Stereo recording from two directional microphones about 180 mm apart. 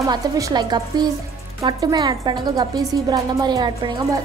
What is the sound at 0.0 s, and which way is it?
A woman's voice, 20° right (ahead or behind).